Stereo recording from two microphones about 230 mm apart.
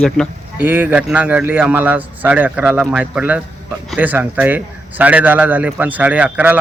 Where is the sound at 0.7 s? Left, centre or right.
Centre.